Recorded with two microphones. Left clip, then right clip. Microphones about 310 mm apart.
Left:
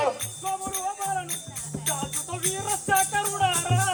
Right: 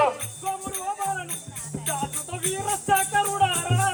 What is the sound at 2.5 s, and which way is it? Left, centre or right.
Music, centre.